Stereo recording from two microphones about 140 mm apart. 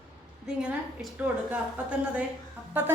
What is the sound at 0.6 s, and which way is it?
Speech, 10° right (ahead or behind).